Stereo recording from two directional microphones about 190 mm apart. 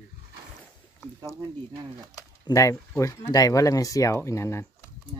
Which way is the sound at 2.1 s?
15° left (ahead or behind).